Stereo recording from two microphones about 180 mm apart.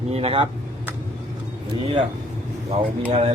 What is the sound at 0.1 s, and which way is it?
Speech, 30° right (ahead or behind).